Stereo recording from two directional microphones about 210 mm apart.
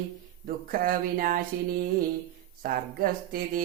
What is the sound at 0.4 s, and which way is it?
Mantra, 45° right (ahead or behind).